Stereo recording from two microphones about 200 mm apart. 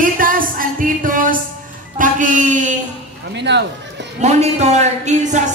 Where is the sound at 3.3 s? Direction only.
60° right (ahead or behind).